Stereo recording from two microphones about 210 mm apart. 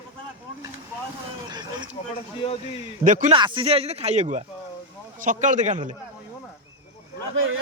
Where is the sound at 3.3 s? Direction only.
25° right (ahead or behind).